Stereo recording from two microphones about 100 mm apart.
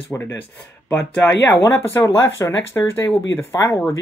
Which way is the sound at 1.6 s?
25° left (ahead or behind).